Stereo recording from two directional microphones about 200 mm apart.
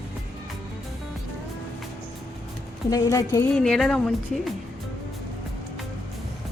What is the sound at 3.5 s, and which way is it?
Speech, centre (ahead or behind).